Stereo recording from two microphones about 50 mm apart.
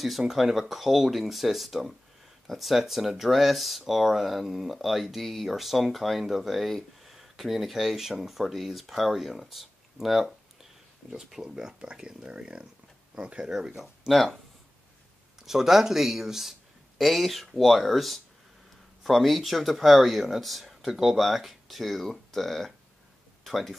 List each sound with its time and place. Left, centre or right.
0.2 s speech: centre
13.7 s speech: centre
15.4 s speech: centre